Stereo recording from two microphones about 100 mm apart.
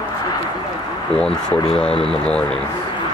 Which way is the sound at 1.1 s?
10° left (ahead or behind).